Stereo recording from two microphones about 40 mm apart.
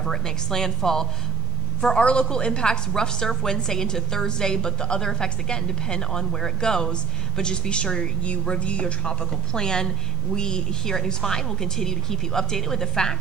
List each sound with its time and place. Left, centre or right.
0.0 s a woman's voice: centre